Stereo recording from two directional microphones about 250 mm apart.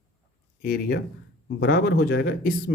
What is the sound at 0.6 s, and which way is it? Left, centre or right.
Speech, left.